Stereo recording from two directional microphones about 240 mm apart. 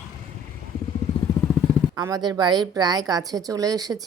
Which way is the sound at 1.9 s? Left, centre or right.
Centre.